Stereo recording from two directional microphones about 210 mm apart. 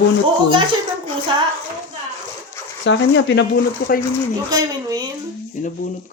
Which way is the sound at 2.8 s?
60° left (ahead or behind).